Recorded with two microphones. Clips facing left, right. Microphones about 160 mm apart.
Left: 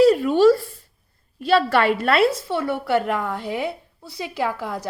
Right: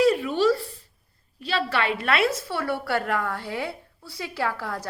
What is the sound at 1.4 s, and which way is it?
Speech, 50° left (ahead or behind).